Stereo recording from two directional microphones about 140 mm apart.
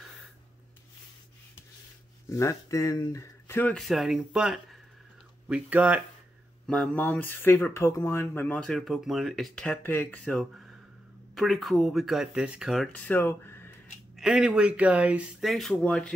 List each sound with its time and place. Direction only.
2.2 s speech: 20° left (ahead or behind)
3.7 s speech: centre (ahead or behind)
6.6 s speech: 10° left (ahead or behind)
10.4 s speech: 5° right (ahead or behind)
12.9 s speech: 10° left (ahead or behind)
14.1 s speech: centre (ahead or behind)
15.8 s speech: 10° left (ahead or behind)